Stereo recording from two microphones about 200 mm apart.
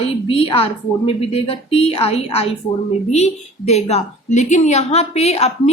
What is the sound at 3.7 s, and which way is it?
A woman's voice, 30° left (ahead or behind).